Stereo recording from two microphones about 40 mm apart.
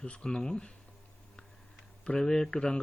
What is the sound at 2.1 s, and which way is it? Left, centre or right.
Speech, centre.